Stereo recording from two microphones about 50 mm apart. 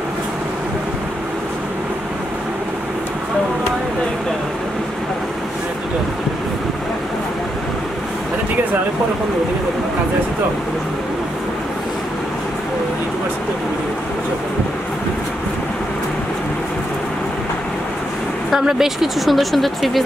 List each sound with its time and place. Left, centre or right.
18.5 s speech: centre